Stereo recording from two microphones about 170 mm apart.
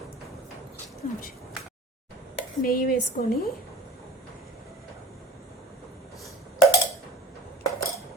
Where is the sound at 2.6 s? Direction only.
60° left (ahead or behind).